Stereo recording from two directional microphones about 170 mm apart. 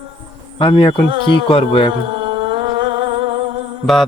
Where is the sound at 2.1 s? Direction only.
30° right (ahead or behind).